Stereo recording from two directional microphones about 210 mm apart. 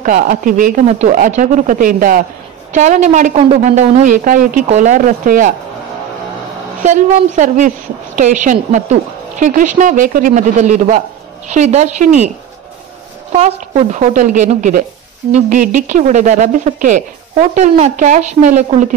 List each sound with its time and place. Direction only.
0.0 s a woman's voice: 40° right (ahead or behind)
6.8 s a woman's voice: 35° right (ahead or behind)
13.4 s a woman's voice: 35° right (ahead or behind)